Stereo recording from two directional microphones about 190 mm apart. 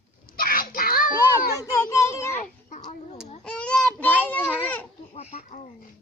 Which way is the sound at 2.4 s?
40° left (ahead or behind).